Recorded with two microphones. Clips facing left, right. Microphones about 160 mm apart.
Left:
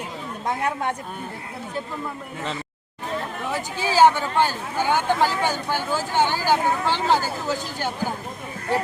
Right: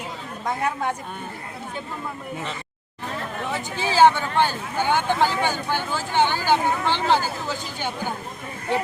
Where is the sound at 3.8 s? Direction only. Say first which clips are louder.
Even; 10° left (ahead or behind).